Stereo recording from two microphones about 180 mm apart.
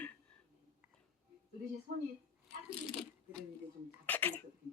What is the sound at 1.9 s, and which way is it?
Speech, 55° right (ahead or behind).